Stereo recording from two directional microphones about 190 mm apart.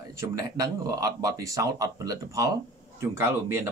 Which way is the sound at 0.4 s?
20° right (ahead or behind).